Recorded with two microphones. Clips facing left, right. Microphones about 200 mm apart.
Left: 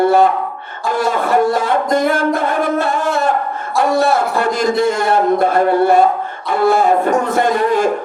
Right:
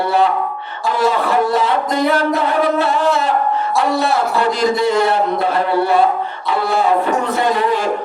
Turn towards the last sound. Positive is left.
turn(degrees=50)  # may be behind; listen again after turning